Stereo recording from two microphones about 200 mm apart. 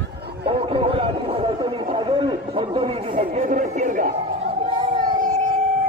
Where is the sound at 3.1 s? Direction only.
40° right (ahead or behind).